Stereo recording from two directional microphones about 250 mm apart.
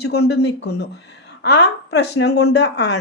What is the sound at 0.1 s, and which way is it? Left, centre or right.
Speech, left.